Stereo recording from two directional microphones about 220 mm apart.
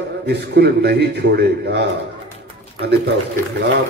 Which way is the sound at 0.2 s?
50° right (ahead or behind).